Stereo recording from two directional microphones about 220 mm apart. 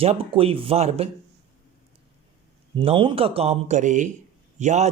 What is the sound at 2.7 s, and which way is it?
Speech, 25° right (ahead or behind).